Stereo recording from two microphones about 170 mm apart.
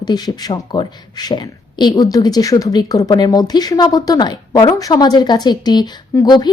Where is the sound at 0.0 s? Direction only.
25° left (ahead or behind).